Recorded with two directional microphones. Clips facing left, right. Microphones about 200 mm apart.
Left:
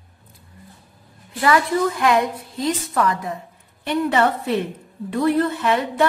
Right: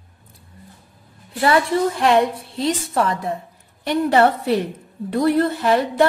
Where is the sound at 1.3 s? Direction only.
30° right (ahead or behind).